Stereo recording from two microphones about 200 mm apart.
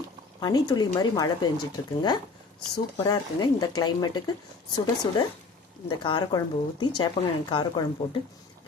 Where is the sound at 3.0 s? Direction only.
20° left (ahead or behind).